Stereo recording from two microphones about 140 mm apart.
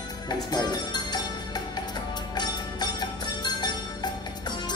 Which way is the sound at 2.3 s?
30° left (ahead or behind).